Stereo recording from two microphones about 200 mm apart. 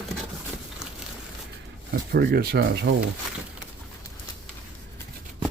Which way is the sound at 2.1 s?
50° right (ahead or behind).